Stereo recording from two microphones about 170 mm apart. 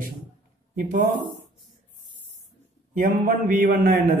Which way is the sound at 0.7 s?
50° right (ahead or behind).